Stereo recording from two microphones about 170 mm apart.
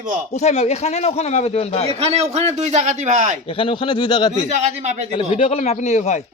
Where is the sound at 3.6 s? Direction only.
30° left (ahead or behind).